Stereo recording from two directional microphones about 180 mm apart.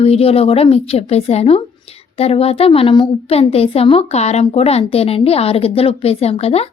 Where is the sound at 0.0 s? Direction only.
35° left (ahead or behind).